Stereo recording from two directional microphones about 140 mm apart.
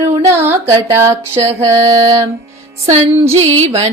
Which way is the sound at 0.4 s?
20° right (ahead or behind).